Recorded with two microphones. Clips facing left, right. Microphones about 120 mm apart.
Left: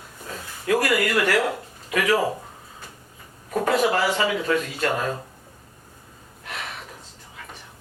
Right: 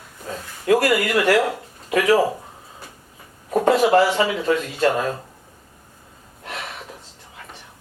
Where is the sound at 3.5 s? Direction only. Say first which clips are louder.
Right 5 dB; 30° right (ahead or behind).